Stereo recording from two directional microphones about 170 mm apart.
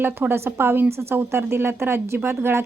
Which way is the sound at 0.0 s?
15° right (ahead or behind).